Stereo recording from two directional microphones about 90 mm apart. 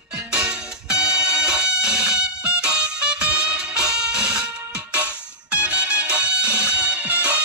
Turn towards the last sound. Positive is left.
turn(degrees=-15)  # may be behind; listen again after turning